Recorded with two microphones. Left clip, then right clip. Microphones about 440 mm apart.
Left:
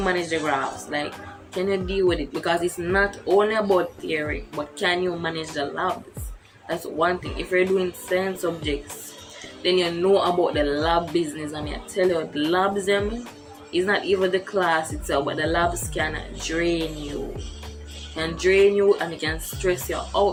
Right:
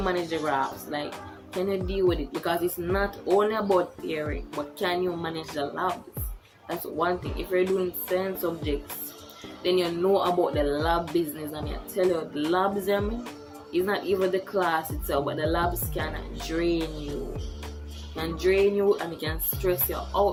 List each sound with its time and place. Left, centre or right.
0.0 s speech: right
7.0 s speech: right
18.2 s speech: right